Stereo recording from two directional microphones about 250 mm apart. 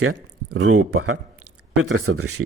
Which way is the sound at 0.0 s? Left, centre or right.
Right.